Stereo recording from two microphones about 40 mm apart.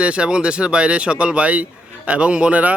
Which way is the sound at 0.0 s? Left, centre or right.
Right.